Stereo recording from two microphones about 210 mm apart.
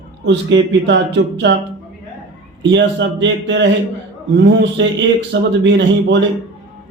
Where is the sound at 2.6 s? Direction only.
60° right (ahead or behind).